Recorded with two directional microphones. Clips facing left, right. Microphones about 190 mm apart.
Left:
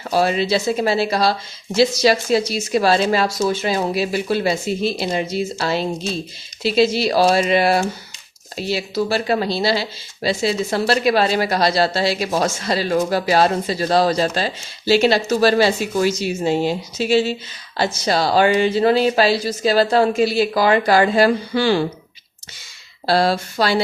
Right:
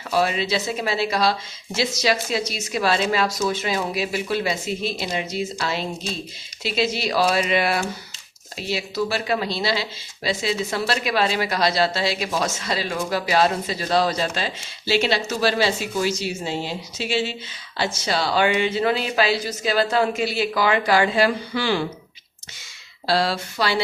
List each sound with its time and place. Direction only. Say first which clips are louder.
0.1 s speech: left 4 dB; 35° left (ahead or behind)
23.0 s speech: left 5 dB; 45° left (ahead or behind)